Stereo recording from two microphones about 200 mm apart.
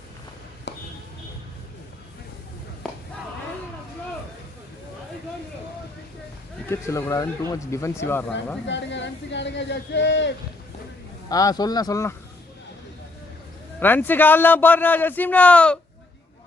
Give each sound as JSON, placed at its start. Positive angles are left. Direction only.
{"t": 0.7, "sound": "speech", "side_deg": 60}
{"t": 2.8, "sound": "a sound", "side_deg": 0}
{"t": 6.7, "sound": "a man's voice", "side_deg": 15}
{"t": 8.6, "sound": "speech", "side_deg": 65}
{"t": 11.3, "sound": "speech", "side_deg": 20}
{"t": 13.7, "sound": "a man's voice", "side_deg": 10}